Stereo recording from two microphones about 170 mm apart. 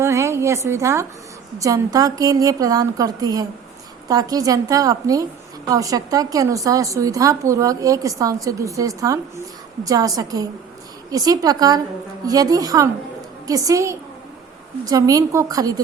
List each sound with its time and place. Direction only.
0.0 s a woman's voice: 15° right (ahead or behind)